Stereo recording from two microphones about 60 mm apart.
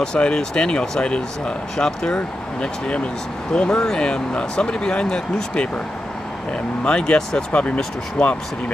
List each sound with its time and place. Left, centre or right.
0.0 s speech: centre
6.8 s speech: centre